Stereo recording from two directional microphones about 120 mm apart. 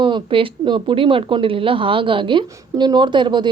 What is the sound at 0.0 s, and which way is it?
A woman's voice, 45° right (ahead or behind).